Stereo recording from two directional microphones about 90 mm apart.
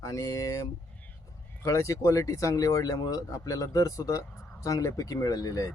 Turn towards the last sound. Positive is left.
turn(degrees=45)  # may be behind; listen again after turning